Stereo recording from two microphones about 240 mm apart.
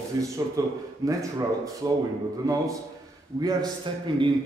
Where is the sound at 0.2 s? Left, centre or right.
Centre.